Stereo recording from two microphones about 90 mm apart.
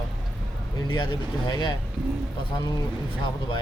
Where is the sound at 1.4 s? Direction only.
60° left (ahead or behind).